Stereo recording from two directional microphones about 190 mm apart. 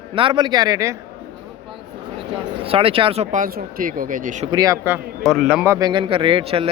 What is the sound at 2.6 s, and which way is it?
Speech, 30° right (ahead or behind).